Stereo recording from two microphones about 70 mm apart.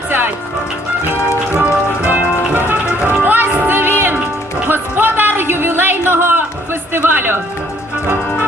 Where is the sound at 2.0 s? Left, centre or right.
Right.